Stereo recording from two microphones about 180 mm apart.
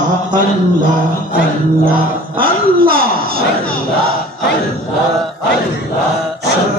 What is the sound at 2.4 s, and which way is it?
Speech, 55° right (ahead or behind).